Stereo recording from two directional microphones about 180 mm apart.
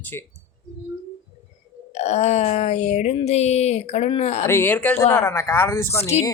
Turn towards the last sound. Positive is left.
turn(degrees=35)  # may be behind; listen again after turning